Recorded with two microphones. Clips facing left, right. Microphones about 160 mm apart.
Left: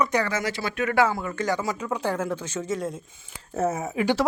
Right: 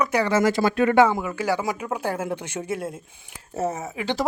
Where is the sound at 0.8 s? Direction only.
20° right (ahead or behind).